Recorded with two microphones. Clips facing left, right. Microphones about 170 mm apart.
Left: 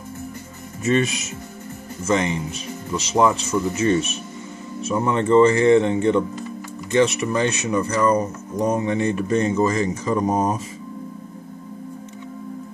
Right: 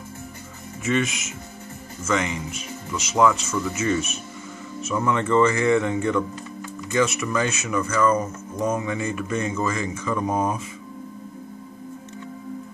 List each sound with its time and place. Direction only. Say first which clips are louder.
0.8 s speech: left 4 dB; 35° left (ahead or behind)